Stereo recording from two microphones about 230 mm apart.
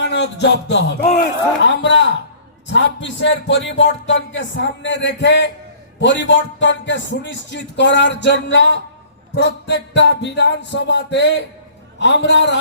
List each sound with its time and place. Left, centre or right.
0.0 s music: left
1.0 s a man's voice: left
1.6 s a man's voice: left